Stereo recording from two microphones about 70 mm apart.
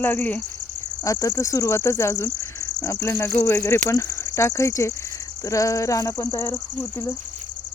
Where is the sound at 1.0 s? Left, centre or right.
Left.